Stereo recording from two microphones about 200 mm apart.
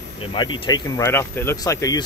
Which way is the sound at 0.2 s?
25° left (ahead or behind).